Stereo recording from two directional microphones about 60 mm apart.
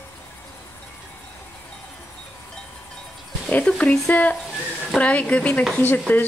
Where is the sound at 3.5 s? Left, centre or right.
Left.